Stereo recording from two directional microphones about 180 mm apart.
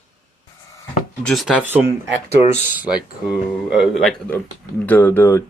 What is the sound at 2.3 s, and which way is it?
Speech, 35° left (ahead or behind).